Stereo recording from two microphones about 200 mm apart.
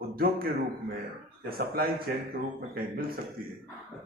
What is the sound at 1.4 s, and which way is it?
A man's voice, 50° right (ahead or behind).